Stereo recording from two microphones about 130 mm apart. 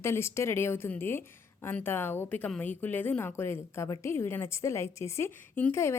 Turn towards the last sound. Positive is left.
turn(degrees=20)  # may be behind; listen again after turning